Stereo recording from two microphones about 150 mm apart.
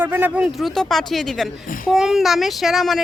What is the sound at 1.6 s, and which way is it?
Speech, 65° left (ahead or behind).